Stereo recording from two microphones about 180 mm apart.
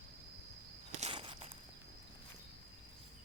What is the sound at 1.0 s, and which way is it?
Walk, 30° right (ahead or behind).